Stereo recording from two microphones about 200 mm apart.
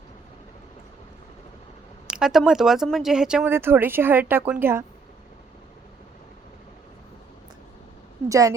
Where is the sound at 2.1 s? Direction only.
5° right (ahead or behind).